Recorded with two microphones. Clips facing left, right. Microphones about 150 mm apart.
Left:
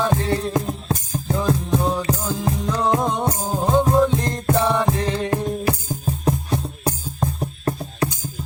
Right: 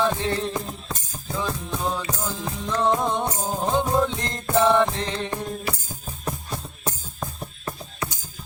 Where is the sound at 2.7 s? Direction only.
5° left (ahead or behind).